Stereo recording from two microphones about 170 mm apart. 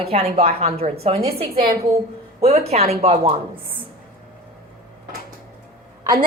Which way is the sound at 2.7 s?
40° right (ahead or behind).